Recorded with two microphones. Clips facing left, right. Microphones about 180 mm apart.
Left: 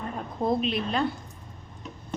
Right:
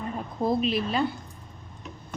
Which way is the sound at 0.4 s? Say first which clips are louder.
Right 1 dB; centre (ahead or behind).